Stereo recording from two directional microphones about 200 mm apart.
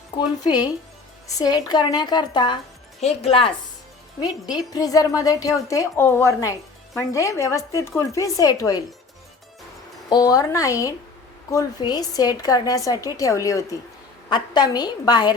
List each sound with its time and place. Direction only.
0.2 s a woman's voice: 20° left (ahead or behind)
10.1 s a woman's voice: 20° left (ahead or behind)